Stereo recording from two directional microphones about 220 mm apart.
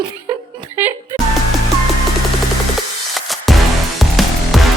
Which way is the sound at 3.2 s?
Centre (ahead or behind).